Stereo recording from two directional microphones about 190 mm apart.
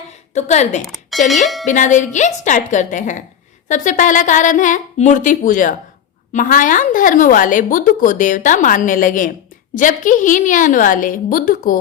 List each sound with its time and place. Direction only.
0.1 s a woman's voice: 35° left (ahead or behind)
0.8 s speech: centre (ahead or behind)
1.6 s a woman's voice: 40° left (ahead or behind)